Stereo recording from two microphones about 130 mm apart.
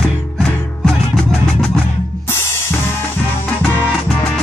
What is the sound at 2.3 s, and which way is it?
Drum kit, 20° left (ahead or behind).